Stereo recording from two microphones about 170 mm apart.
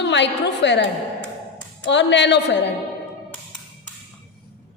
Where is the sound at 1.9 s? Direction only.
90° left.